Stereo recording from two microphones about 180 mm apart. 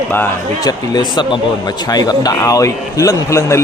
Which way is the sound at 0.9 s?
25° left (ahead or behind).